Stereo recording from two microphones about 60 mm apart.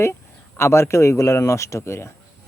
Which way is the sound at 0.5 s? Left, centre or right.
Left.